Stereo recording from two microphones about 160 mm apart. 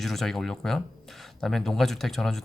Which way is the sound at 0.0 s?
Centre (ahead or behind).